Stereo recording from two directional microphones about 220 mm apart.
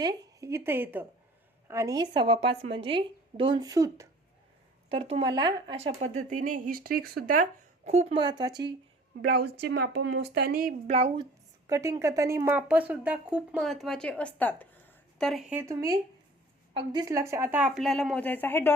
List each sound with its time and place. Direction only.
0.0 s speech: 15° right (ahead or behind)
4.9 s speech: 25° right (ahead or behind)
5.8 s speech: 35° right (ahead or behind)
7.9 s speech: 25° right (ahead or behind)
9.3 s a woman's voice: 50° right (ahead or behind)
10.9 s speech: 25° right (ahead or behind)
11.7 s a woman's voice: 15° right (ahead or behind); by 18.7 s 10° left (ahead or behind)